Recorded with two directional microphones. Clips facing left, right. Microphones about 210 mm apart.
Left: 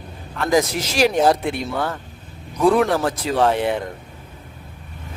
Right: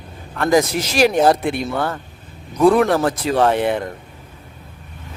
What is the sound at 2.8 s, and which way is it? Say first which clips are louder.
Speech: right 3 dB; 55° right (ahead or behind).